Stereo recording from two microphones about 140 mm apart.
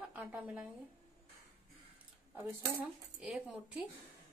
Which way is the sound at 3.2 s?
5° right (ahead or behind).